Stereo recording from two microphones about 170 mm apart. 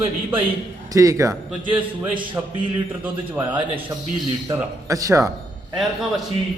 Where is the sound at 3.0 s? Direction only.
10° right (ahead or behind).